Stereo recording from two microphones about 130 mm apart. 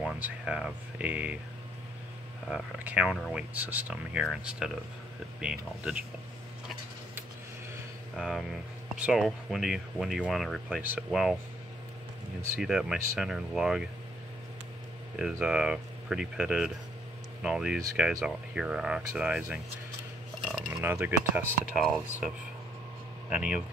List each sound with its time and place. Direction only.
0.0 s speech: 5° right (ahead or behind)
2.5 s speech: 10° right (ahead or behind)
8.2 s speech: centre (ahead or behind)
10.8 s speech: 15° right (ahead or behind)
11.1 s speech: centre (ahead or behind)
12.5 s speech: 5° right (ahead or behind)
15.4 s speech: 5° right (ahead or behind)
20.4 s a sound: 5° right (ahead or behind)
20.8 s speech: 15° right (ahead or behind)
23.3 s speech: 10° right (ahead or behind)